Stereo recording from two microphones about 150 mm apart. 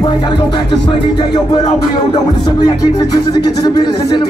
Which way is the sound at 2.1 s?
25° left (ahead or behind).